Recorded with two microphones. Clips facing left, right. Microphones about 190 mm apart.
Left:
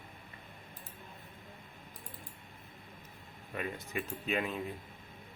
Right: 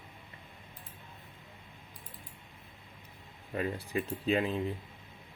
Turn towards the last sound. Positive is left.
turn(degrees=-30)  # may be behind; listen again after turning